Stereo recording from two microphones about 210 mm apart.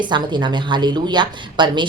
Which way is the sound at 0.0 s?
20° right (ahead or behind).